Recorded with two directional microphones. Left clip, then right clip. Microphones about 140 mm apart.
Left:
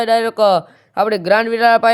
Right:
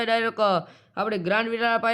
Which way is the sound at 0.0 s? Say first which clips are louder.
Left 9 dB; 45° left (ahead or behind).